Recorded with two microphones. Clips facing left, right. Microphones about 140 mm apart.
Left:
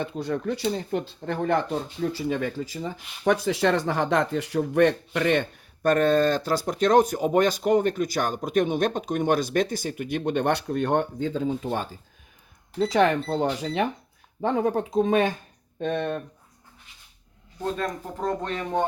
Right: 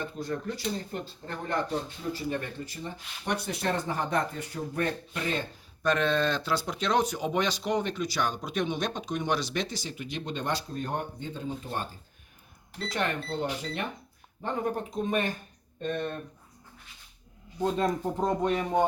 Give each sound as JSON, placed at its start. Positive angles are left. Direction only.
{"t": 0.0, "sound": "speech", "side_deg": 70}
{"t": 5.8, "sound": "speech", "side_deg": 45}
{"t": 12.9, "sound": "speech", "side_deg": 90}
{"t": 17.6, "sound": "speech", "side_deg": -15}